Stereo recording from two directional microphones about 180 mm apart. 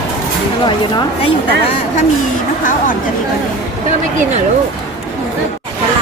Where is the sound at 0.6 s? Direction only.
25° left (ahead or behind).